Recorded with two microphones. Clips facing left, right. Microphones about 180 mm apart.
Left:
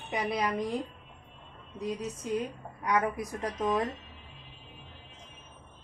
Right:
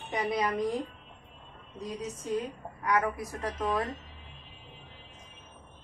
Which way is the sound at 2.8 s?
20° left (ahead or behind).